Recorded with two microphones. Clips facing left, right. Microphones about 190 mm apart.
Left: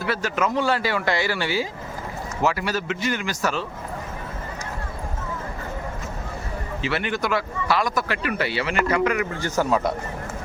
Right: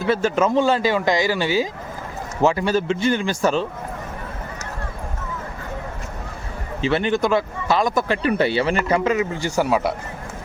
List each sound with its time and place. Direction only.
0.0 s speech: 25° right (ahead or behind)
6.8 s speech: 25° right (ahead or behind)
9.4 s a man's voice: 10° right (ahead or behind)